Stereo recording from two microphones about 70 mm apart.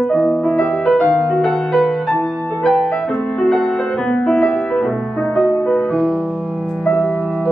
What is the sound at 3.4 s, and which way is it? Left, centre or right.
Music, centre.